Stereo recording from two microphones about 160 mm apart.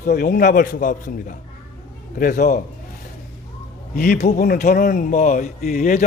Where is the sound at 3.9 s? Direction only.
75° left (ahead or behind).